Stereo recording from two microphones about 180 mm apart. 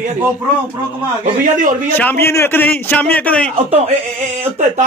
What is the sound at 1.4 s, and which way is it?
Speech, 45° right (ahead or behind).